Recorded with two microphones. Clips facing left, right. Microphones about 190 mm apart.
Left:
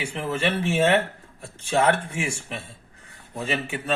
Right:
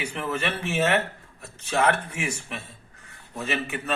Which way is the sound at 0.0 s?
25° left (ahead or behind).